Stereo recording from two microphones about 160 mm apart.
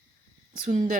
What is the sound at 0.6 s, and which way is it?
Speech, 50° right (ahead or behind).